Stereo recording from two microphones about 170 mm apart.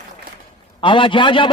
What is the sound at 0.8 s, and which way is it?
Speech, 30° left (ahead or behind).